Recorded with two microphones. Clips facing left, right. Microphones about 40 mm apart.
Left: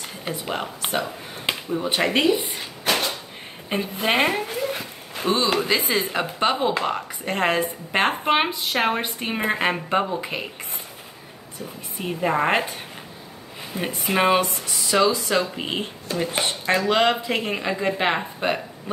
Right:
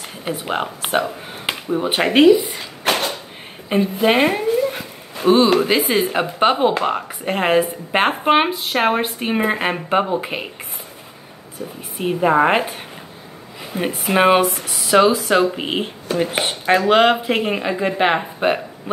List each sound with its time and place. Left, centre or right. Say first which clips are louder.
0.2 s speech: right 6 dB; right
2.9 s a sound: right 3 dB; right
3.6 s a woman's voice: right 7 dB; centre
5.7 s speech: right 5 dB; right
9.8 s speech: right 4 dB; right
12.0 s speech: right 7 dB; centre
13.7 s speech: right 5 dB; centre
14.4 s speech: right 6 dB; right; by 18.6 s centre